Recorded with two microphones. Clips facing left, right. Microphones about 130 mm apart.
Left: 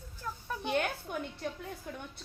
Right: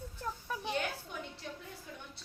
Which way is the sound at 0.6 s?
55° left (ahead or behind).